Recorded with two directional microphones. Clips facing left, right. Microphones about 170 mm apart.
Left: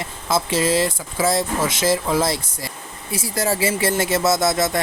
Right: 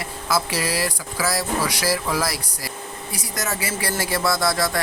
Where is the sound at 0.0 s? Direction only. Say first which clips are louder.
Left 1 dB; 25° left (ahead or behind).